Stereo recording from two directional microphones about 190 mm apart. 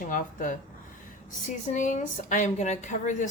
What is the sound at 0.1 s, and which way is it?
A woman's voice, 45° left (ahead or behind).